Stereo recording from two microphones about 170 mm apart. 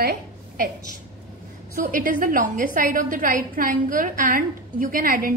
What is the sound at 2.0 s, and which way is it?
A woman's voice, 55° right (ahead or behind).